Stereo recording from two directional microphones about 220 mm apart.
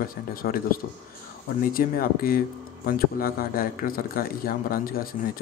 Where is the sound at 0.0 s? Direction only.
40° left (ahead or behind).